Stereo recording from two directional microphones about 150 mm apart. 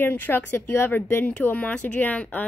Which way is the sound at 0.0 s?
15° left (ahead or behind).